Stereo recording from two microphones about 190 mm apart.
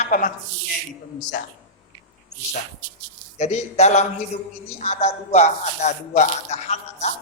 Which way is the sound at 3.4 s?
35° left (ahead or behind).